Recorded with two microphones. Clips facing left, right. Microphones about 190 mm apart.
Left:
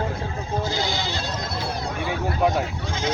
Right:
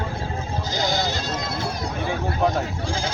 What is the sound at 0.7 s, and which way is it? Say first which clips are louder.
Speech: right 2 dB; 40° right (ahead or behind).